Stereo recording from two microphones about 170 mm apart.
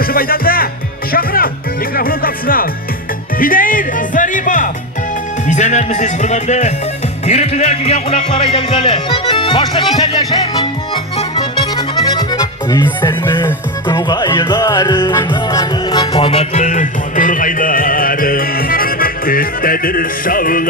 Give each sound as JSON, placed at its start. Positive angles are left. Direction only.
{"t": 0.0, "sound": "music", "side_deg": 60}
{"t": 5.5, "sound": "speech", "side_deg": 45}
{"t": 7.3, "sound": "music", "side_deg": 40}